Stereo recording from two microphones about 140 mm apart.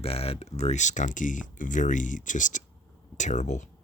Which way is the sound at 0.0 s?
45° left (ahead or behind).